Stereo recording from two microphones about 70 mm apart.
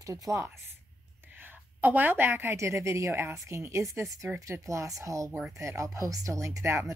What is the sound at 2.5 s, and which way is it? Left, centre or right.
A woman's voice, right.